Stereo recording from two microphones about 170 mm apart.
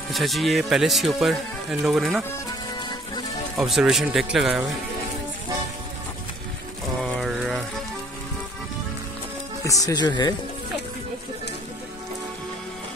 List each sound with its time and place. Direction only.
0.1 s speech: centre (ahead or behind)
3.5 s speech: centre (ahead or behind)
7.0 s a sound: centre (ahead or behind)
9.7 s speech: 20° left (ahead or behind)